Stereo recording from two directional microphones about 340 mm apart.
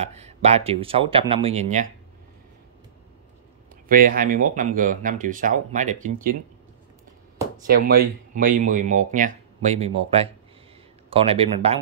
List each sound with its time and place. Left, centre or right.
0.0 s speech: centre
3.9 s speech: right
7.6 s speech: right